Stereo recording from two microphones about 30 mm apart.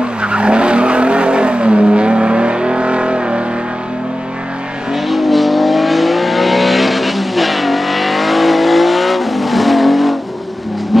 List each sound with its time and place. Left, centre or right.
0.0 s vehicle: right
5.0 s vehicle: centre